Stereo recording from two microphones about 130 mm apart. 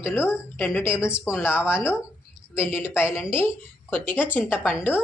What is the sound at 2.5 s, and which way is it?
Speech, 15° left (ahead or behind).